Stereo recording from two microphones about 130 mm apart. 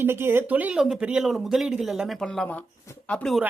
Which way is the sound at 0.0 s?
15° right (ahead or behind).